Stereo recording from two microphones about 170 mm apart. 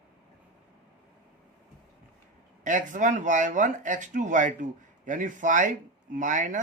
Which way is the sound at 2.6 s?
45° right (ahead or behind).